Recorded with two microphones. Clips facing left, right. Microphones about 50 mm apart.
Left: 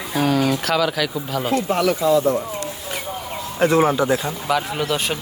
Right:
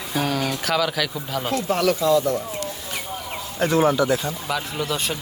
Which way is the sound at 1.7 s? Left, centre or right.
Centre.